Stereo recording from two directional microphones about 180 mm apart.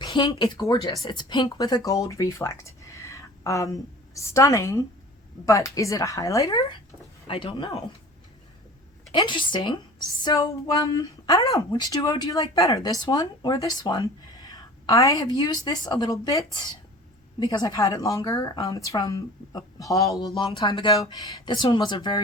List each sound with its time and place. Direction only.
0.0 s a woman's voice: 25° left (ahead or behind)
9.1 s a woman's voice: 25° left (ahead or behind)